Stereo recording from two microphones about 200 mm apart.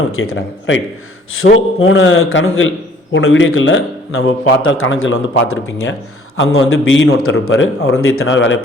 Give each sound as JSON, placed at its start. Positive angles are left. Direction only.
{"t": 0.1, "sound": "a man's voice", "side_deg": 90}
{"t": 4.2, "sound": "a man's voice", "side_deg": 70}
{"t": 8.0, "sound": "a man's voice", "side_deg": 80}